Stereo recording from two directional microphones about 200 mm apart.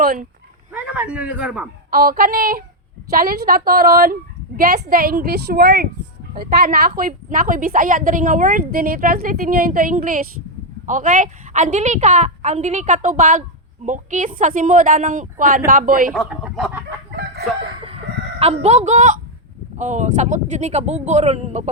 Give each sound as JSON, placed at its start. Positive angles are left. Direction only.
{"t": 0.0, "sound": "speech", "side_deg": -45}
{"t": 0.7, "sound": "a man's voice", "side_deg": -5}
{"t": 1.9, "sound": "a woman's voice", "side_deg": -45}
{"t": 16.1, "sound": "speech", "side_deg": 0}
{"t": 17.8, "sound": "chicken", "side_deg": -30}
{"t": 19.8, "sound": "a woman's voice", "side_deg": -35}